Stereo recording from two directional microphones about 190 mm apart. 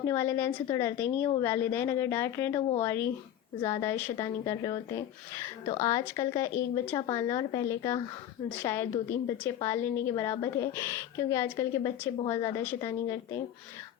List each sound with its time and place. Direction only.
0.0 s a woman's voice: 15° left (ahead or behind)